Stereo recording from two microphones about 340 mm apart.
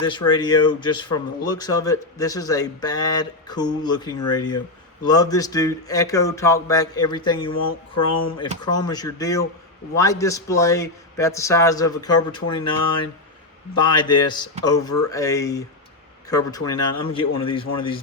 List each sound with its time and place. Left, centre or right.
0.0 s speech: centre
7.7 s a sound: left
8.6 s speech: centre